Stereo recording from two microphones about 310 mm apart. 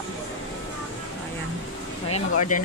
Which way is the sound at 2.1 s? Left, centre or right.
Left.